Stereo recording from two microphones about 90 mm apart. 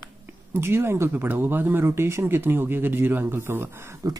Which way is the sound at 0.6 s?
25° right (ahead or behind).